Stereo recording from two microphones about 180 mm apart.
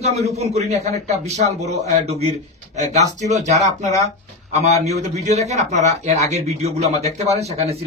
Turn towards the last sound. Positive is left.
turn(degrees=-35)  # may be behind; listen again after turning